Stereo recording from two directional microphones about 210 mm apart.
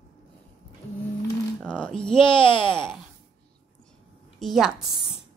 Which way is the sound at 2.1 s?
25° left (ahead or behind).